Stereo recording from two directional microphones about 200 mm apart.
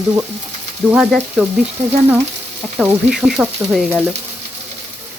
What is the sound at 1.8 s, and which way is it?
Frying, 35° right (ahead or behind).